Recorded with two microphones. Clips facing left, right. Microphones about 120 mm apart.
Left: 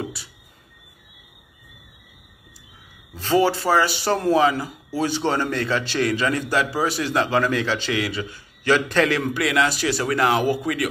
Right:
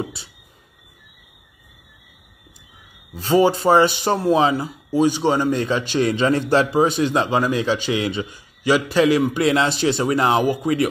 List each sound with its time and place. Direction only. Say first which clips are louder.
0.0 s a sound: right 2 dB; 25° right (ahead or behind)
3.1 s speech: right 3 dB; 15° right (ahead or behind)
9.4 s speech: right 3 dB; 25° right (ahead or behind)